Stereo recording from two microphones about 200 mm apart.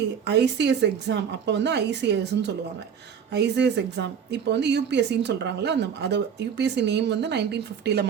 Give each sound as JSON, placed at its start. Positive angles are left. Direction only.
{"t": 0.3, "sound": "a woman's voice", "side_deg": -60}